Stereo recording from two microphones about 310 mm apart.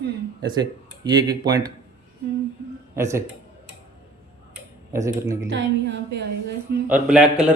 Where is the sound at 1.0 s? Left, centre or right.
Centre.